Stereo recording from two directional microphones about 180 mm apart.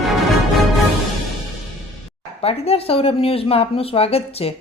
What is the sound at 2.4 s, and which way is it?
Speech, 35° left (ahead or behind).